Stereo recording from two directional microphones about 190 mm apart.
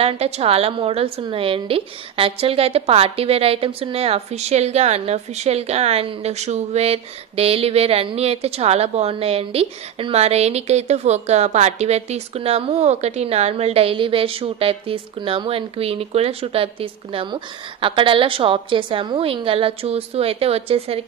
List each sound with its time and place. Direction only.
0.0 s a woman's voice: 30° right (ahead or behind)